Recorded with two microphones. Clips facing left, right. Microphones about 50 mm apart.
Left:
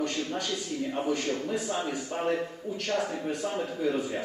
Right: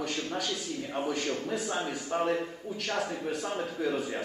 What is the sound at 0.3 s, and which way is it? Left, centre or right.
A man's voice, centre.